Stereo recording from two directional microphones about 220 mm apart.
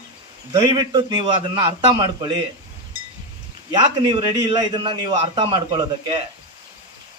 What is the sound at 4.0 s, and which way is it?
A man's voice, 20° right (ahead or behind).